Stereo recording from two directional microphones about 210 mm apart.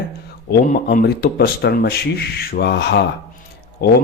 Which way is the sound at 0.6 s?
40° left (ahead or behind).